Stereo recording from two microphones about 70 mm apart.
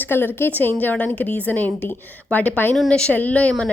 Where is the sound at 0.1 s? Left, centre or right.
Left.